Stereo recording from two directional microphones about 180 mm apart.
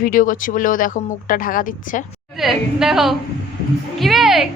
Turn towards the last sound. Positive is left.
turn(degrees=0)  # may be behind; listen again after turning